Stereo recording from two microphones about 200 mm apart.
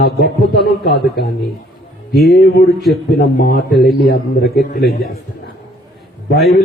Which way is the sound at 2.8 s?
Centre (ahead or behind).